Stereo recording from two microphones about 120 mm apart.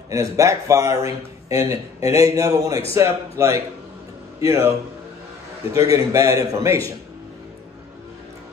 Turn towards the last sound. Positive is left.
turn(degrees=-25)  # may be behind; listen again after turning